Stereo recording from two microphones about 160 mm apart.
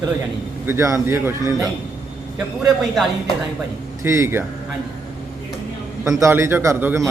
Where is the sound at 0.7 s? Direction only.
20° right (ahead or behind).